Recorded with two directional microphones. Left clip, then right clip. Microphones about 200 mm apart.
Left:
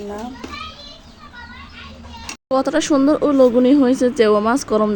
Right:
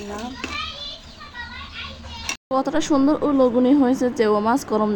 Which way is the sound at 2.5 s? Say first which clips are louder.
Left 4 dB; 20° left (ahead or behind).